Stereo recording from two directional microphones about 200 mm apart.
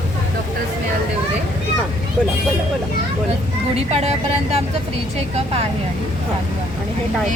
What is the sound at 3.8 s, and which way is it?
Speech, 30° right (ahead or behind).